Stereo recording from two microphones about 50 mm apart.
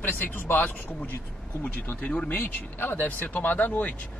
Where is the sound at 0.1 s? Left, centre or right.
Left.